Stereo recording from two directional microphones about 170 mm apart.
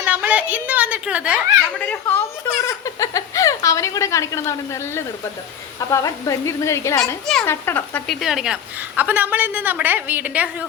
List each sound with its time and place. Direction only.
0.0 s a woman's voice: 5° right (ahead or behind)
1.8 s a woman's voice: 10° left (ahead or behind); by 10.7 s 10° right (ahead or behind)